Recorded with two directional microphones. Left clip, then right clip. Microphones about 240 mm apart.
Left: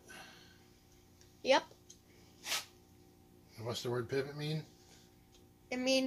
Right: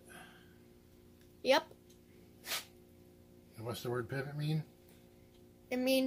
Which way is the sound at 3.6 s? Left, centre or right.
Right.